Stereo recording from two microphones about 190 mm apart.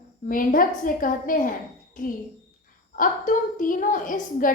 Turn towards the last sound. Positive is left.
turn(degrees=45)  # may be behind; listen again after turning